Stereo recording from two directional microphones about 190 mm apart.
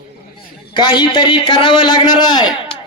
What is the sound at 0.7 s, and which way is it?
A man's voice, 25° left (ahead or behind).